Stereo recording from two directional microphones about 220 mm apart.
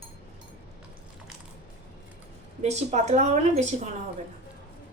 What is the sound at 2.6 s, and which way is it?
A woman's voice, 30° right (ahead or behind).